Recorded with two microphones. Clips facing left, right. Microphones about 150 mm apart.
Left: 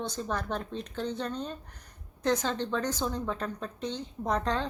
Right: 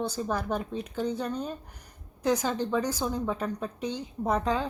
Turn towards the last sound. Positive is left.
turn(degrees=-5)  # may be behind; listen again after turning